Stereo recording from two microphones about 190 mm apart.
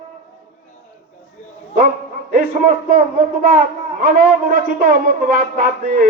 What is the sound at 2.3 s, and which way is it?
Speech, 50° right (ahead or behind).